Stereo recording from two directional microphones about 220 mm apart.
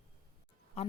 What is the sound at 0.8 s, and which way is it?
Speech, 30° left (ahead or behind).